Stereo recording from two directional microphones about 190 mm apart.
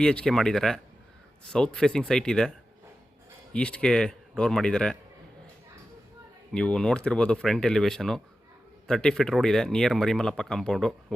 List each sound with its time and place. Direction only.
0.0 s speech: 5° left (ahead or behind)
6.5 s speech: 5° left (ahead or behind)